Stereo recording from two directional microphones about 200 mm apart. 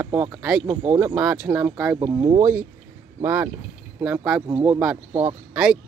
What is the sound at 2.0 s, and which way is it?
Speech, 25° right (ahead or behind).